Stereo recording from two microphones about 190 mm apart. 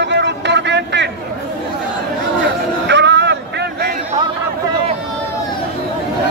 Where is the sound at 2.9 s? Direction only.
70° right (ahead or behind).